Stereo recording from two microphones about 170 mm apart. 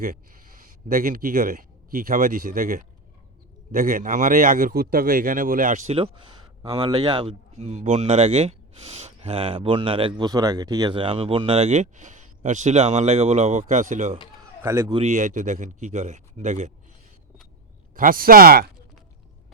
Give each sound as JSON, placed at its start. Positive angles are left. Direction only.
{"t": 0.0, "sound": "a man's voice", "side_deg": -55}
{"t": 14.6, "sound": "a man's voice", "side_deg": -15}
{"t": 14.9, "sound": "speech", "side_deg": -45}
{"t": 17.9, "sound": "speech", "side_deg": -55}